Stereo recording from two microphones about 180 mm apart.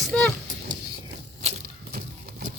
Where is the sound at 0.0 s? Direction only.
5° left (ahead or behind).